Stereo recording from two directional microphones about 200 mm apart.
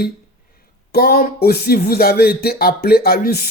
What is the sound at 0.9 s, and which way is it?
Speech, 50° left (ahead or behind).